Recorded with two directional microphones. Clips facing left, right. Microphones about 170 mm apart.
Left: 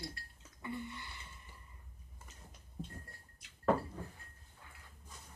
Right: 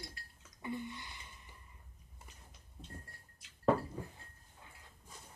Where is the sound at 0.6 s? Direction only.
15° right (ahead or behind).